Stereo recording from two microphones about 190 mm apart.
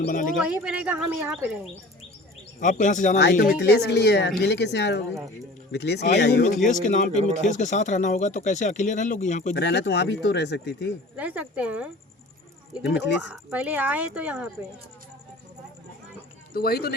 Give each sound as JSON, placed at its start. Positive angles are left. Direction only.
{"t": 0.0, "sound": "speech", "side_deg": 45}
{"t": 0.3, "sound": "speech", "side_deg": -5}
{"t": 2.6, "sound": "speech", "side_deg": 40}
{"t": 3.6, "sound": "speech", "side_deg": 60}
{"t": 6.4, "sound": "speech", "side_deg": 40}
{"t": 9.6, "sound": "speech", "side_deg": 65}
{"t": 11.2, "sound": "speech", "side_deg": -5}
{"t": 13.2, "sound": "speech", "side_deg": -5}
{"t": 16.5, "sound": "speech", "side_deg": 55}